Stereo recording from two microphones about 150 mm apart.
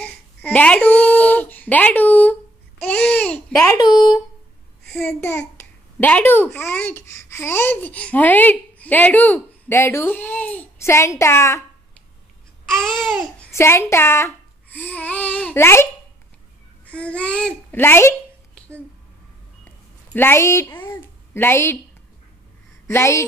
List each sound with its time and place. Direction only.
0.0 s babbling: 10° left (ahead or behind)
2.8 s a child's voice: 10° left (ahead or behind)
3.7 s speech: 30° left (ahead or behind)
4.8 s a child's voice: 5° left (ahead or behind)
12.6 s babbling: centre (ahead or behind)
13.5 s a child's voice: 20° left (ahead or behind)
20.1 s a woman's voice: 15° left (ahead or behind)
22.8 s a child's voice: 20° left (ahead or behind)